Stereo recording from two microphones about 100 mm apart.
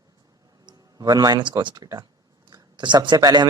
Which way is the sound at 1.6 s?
50° right (ahead or behind).